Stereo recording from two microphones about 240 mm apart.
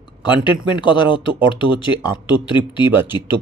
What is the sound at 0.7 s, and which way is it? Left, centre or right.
Speech, centre.